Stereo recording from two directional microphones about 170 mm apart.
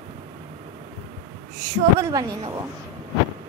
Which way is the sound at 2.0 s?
20° right (ahead or behind).